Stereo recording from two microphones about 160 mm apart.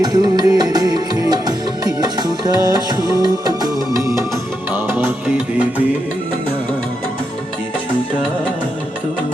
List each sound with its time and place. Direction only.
0.0 s music: 25° right (ahead or behind); by 5.8 s 10° right (ahead or behind)